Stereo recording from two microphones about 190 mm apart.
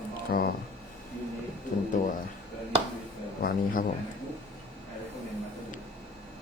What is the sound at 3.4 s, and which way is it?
Speech, 50° left (ahead or behind).